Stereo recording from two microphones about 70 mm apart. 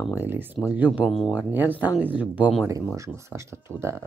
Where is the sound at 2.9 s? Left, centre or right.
Right.